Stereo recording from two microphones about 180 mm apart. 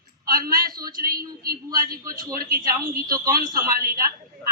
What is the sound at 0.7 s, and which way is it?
A man's voice, 20° right (ahead or behind).